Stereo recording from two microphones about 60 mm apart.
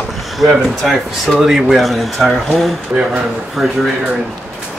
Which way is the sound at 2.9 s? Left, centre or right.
Right.